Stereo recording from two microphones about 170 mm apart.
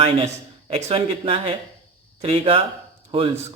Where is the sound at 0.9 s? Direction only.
35° right (ahead or behind).